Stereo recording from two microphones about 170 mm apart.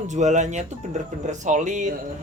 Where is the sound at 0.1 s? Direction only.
45° right (ahead or behind).